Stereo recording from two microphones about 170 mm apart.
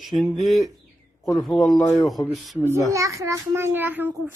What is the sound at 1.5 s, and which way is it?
Speech, 20° left (ahead or behind).